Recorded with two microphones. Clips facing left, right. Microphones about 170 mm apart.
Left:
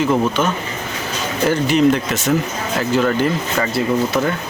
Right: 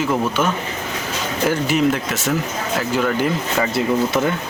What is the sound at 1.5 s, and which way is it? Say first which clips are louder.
Speech: left 4 dB; 5° right (ahead or behind).